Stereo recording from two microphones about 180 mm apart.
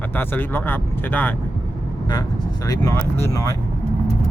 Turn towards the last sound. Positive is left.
turn(degrees=20)  # may be behind; listen again after turning